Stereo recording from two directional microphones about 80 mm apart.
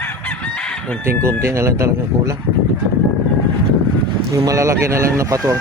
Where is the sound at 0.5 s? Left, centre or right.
Centre.